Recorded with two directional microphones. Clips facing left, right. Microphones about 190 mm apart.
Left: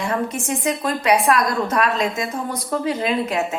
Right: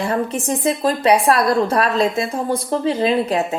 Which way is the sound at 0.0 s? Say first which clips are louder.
Right 3 dB; 30° right (ahead or behind).